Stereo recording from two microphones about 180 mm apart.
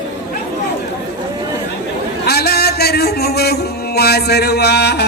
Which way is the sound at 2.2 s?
60° left (ahead or behind).